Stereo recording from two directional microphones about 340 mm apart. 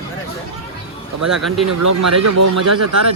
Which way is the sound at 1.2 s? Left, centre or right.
Centre.